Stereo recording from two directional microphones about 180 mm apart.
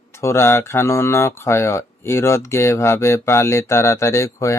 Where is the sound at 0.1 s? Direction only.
15° left (ahead or behind).